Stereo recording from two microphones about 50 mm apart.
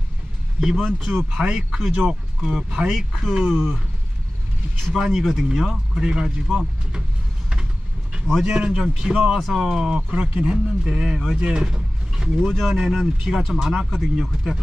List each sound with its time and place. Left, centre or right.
0.6 s speech: centre
1.4 s speech: centre
2.9 s speech: centre
4.9 s speech: centre
8.5 s speech: centre
9.4 s speech: centre
10.3 s speech: right
10.9 s speech: centre